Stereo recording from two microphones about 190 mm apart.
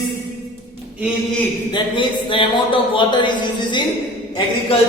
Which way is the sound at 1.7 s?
25° left (ahead or behind).